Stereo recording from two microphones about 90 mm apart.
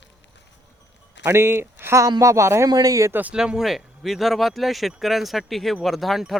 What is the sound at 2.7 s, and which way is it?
Speech, 45° right (ahead or behind).